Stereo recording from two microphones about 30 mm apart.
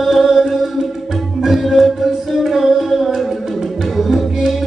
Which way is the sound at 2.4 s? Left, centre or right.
Centre.